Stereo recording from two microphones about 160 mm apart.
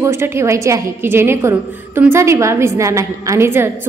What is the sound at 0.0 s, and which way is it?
A woman's voice, 15° right (ahead or behind).